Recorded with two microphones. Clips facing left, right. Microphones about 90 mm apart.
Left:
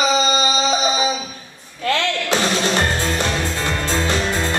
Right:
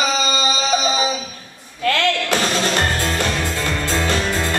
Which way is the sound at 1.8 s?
25° left (ahead or behind).